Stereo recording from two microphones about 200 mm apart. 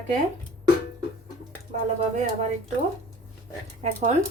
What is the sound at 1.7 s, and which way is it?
Speech, 35° right (ahead or behind).